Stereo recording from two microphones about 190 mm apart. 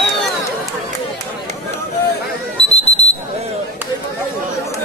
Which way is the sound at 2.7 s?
35° left (ahead or behind).